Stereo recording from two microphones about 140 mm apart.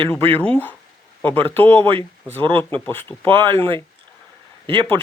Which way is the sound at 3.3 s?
35° right (ahead or behind).